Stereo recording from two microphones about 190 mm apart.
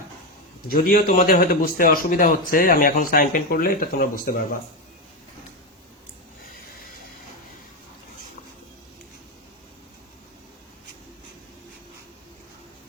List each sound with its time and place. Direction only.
0.7 s a man's voice: 50° left (ahead or behind)